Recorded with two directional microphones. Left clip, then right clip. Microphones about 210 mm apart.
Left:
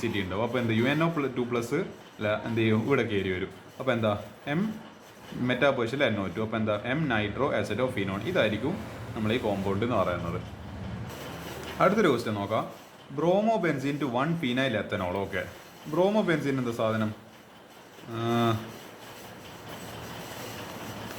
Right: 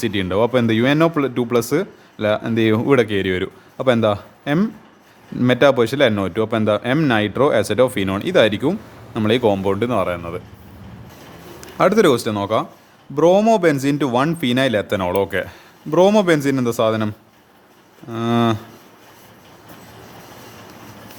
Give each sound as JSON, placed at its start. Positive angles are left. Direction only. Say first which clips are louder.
{"t": 0.0, "sound": "speech", "louder": "right 12 dB", "side_deg": -50}
{"t": 11.8, "sound": "speech", "louder": "right 9 dB", "side_deg": -55}
{"t": 18.1, "sound": "speech", "louder": "right 8 dB", "side_deg": -55}